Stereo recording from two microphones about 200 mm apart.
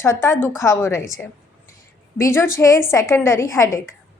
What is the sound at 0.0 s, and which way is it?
A woman's voice, 10° left (ahead or behind).